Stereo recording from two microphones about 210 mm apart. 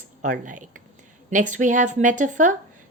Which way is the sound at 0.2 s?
40° right (ahead or behind).